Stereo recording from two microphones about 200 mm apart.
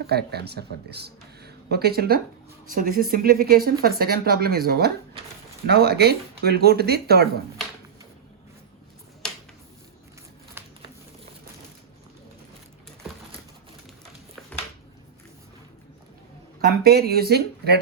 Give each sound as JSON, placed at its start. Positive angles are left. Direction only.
{"t": 0.0, "sound": "speech", "side_deg": -55}
{"t": 16.8, "sound": "speech", "side_deg": -50}